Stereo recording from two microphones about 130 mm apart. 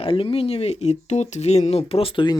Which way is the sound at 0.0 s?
45° left (ahead or behind).